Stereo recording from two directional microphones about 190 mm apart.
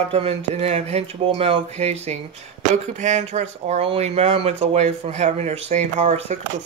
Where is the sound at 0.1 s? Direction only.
35° right (ahead or behind).